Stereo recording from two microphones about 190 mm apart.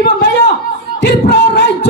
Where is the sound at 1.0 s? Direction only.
60° left (ahead or behind).